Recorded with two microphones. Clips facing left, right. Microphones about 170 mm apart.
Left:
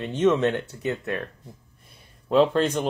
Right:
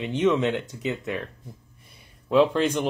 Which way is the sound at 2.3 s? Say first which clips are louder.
Even; 10° right (ahead or behind).